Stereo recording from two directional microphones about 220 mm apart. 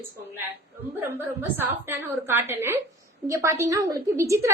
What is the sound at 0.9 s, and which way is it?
A woman's voice, 10° right (ahead or behind).